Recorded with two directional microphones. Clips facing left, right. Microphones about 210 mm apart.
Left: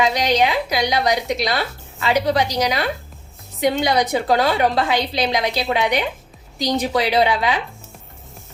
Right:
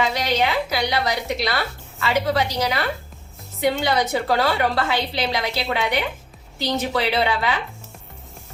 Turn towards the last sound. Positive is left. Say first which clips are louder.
# left 4 dB
turn(degrees=15)  # may be behind; listen again after turning